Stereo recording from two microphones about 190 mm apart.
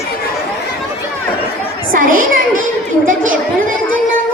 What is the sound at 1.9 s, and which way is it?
Speech, 50° right (ahead or behind).